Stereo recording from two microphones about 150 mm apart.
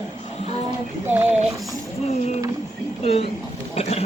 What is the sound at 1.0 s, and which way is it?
Speech, 10° right (ahead or behind).